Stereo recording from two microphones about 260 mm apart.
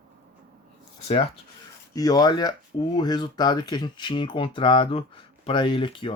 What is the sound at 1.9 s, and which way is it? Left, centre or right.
Speech, centre.